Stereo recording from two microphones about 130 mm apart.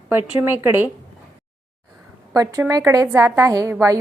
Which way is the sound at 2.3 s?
25° right (ahead or behind).